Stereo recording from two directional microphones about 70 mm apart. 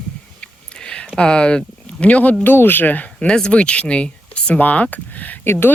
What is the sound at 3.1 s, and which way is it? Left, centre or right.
Speech, centre.